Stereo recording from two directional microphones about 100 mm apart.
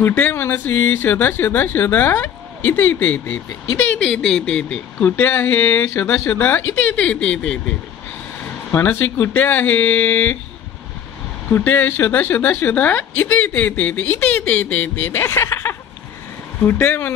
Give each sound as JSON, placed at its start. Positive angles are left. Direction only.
{"t": 0.1, "sound": "speech", "side_deg": 20}
{"t": 3.9, "sound": "speech", "side_deg": 10}
{"t": 8.7, "sound": "speech", "side_deg": 20}
{"t": 11.5, "sound": "speech", "side_deg": 20}